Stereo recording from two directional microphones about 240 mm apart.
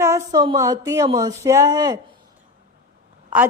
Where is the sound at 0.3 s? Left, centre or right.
Centre.